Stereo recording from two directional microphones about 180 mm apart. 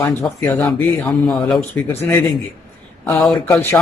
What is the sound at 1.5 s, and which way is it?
Speech, centre (ahead or behind).